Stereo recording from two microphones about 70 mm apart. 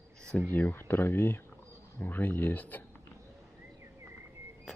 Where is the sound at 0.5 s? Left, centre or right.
Left.